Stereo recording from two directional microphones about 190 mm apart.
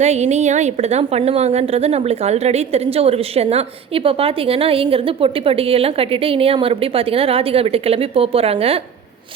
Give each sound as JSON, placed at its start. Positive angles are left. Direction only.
{"t": 0.0, "sound": "a woman's voice", "side_deg": -35}